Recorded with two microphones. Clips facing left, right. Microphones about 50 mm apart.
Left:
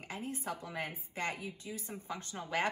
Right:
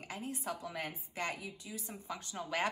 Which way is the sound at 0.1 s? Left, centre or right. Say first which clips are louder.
Left 1 dB; left.